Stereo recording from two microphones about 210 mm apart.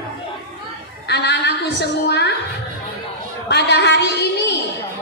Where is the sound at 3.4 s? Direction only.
55° left (ahead or behind).